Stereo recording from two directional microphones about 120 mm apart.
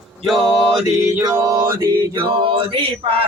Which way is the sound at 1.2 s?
30° right (ahead or behind).